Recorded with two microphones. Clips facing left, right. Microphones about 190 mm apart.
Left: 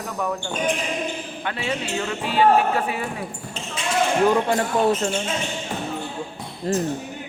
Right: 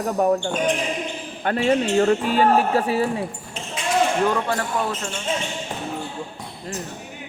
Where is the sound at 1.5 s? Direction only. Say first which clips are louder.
Right 8 dB; 45° right (ahead or behind).